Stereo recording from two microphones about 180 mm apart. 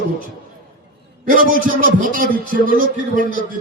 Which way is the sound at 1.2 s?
50° right (ahead or behind).